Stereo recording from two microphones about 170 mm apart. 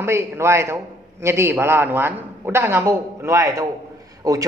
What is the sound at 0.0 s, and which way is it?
A man's voice, 15° right (ahead or behind).